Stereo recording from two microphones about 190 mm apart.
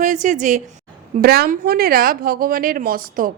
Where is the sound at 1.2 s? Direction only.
55° right (ahead or behind).